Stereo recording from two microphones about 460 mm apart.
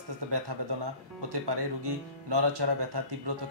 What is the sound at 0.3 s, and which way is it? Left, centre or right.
Speech, right.